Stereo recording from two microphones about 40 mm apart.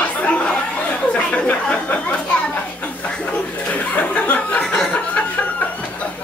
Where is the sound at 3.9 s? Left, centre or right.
Left.